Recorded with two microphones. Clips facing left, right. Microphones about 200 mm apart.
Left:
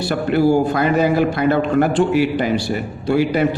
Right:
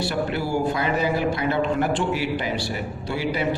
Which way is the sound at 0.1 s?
55° left (ahead or behind).